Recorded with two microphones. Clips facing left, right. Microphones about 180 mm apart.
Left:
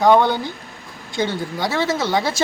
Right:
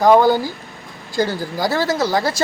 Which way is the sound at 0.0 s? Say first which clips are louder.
Right 2 dB; centre (ahead or behind).